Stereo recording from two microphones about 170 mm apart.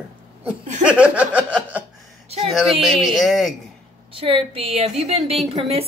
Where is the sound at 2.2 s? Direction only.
35° right (ahead or behind).